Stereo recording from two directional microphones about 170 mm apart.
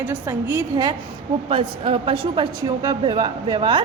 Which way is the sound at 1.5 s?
30° right (ahead or behind).